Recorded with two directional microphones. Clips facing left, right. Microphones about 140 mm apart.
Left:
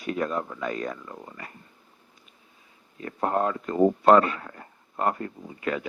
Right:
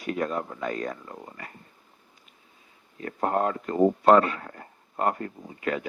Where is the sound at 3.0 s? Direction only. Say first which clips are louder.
Even; 35° right (ahead or behind).